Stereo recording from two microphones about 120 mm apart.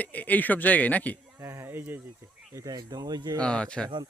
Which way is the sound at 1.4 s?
20° right (ahead or behind).